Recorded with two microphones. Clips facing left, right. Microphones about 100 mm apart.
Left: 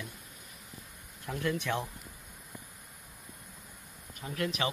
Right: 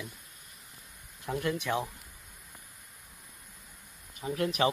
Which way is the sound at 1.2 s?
10° right (ahead or behind).